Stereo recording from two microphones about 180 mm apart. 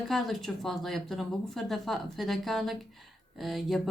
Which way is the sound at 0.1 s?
Centre (ahead or behind).